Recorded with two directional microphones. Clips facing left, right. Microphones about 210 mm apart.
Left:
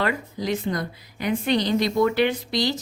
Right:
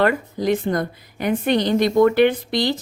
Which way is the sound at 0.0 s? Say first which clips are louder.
Right 6 dB; 55° right (ahead or behind).